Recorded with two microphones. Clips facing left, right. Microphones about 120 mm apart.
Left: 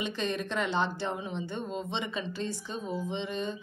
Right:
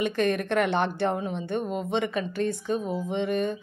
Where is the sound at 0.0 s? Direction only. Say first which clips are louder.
Right 7 dB; 55° right (ahead or behind).